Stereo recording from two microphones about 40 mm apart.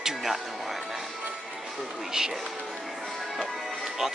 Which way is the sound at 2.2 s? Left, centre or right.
Centre.